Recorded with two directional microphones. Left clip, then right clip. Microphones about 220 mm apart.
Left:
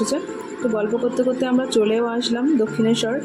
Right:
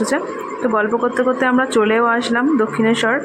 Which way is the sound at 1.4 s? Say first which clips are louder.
Right 4 dB; centre (ahead or behind).